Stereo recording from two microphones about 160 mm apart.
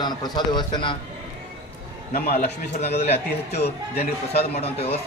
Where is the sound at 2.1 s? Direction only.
75° left (ahead or behind).